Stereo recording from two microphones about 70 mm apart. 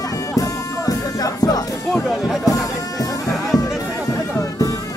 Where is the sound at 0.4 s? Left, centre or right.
Left.